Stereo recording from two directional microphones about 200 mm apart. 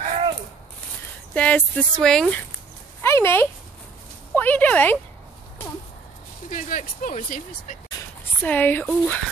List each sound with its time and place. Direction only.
1.3 s speech: 5° left (ahead or behind)
3.0 s a sound: 10° left (ahead or behind)
4.4 s speech: 10° left (ahead or behind)
6.5 s speech: 40° left (ahead or behind)
8.4 s speech: 10° left (ahead or behind)